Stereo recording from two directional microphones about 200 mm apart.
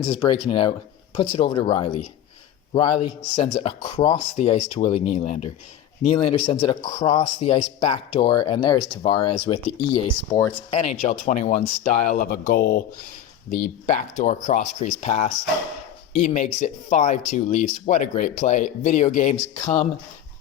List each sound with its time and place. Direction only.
0.0 s a man's voice: 25° left (ahead or behind)
3.3 s a man's voice: 25° left (ahead or behind)